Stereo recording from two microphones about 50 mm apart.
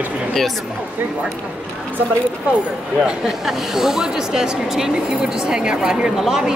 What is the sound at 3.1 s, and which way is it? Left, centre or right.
Speech, centre.